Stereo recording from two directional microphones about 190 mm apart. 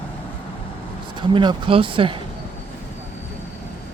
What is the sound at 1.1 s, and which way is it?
Speech, 25° right (ahead or behind).